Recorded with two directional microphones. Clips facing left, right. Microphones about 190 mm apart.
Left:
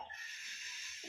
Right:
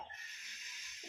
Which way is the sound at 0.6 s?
15° right (ahead or behind).